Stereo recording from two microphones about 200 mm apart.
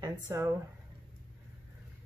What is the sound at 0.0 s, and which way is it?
Speech, 15° right (ahead or behind).